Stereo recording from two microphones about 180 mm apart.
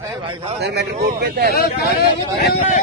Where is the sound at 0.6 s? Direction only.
70° right (ahead or behind).